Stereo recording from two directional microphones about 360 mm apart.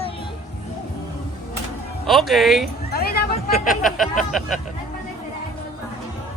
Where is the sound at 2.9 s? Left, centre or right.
Left.